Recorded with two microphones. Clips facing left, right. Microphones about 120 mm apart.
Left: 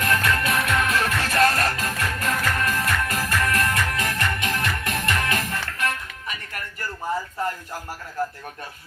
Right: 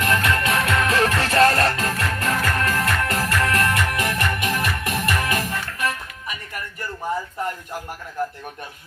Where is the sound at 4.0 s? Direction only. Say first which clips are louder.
Right 2 dB; 20° right (ahead or behind).